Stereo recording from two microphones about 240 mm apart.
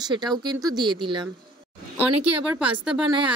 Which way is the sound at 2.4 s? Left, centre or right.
Centre.